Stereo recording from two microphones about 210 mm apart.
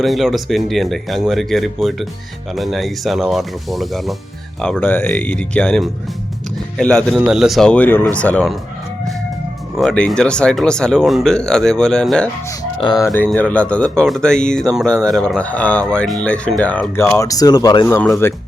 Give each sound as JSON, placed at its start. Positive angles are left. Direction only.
{"t": 0.0, "sound": "speech", "side_deg": 0}
{"t": 9.7, "sound": "speech", "side_deg": 5}
{"t": 12.5, "sound": "speech", "side_deg": 15}